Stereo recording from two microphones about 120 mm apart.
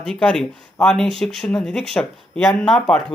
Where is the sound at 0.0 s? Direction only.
5° left (ahead or behind).